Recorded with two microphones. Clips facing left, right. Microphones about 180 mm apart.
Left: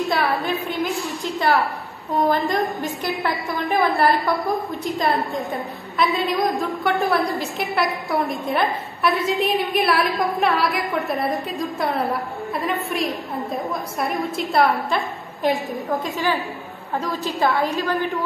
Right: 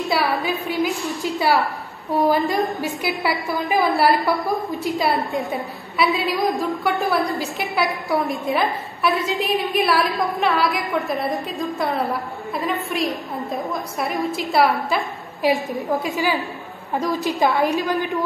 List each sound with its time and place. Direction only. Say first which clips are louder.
0.1 s a woman's voice: even; centre (ahead or behind)
16.9 s a woman's voice: right 3 dB; 15° right (ahead or behind)